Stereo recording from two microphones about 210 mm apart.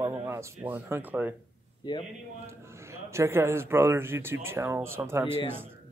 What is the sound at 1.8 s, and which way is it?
Speech, 20° left (ahead or behind).